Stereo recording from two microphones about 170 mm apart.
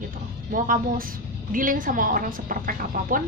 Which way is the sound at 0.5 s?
50° right (ahead or behind).